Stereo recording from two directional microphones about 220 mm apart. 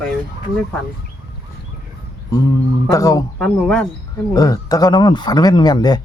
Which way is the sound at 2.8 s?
15° left (ahead or behind).